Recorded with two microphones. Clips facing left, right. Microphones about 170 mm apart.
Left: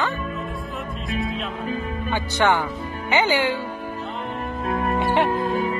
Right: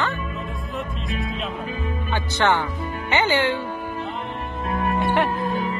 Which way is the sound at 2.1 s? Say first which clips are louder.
Left 1 dB; 10° left (ahead or behind).